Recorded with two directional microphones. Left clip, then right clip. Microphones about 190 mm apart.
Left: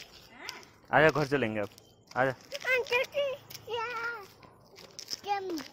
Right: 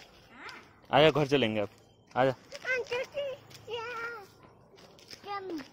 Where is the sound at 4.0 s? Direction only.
5° left (ahead or behind).